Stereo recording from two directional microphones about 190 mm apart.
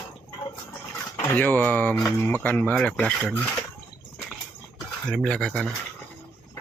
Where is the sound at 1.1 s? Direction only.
10° left (ahead or behind).